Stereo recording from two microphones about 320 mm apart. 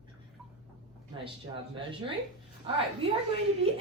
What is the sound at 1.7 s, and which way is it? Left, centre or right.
Speech, centre.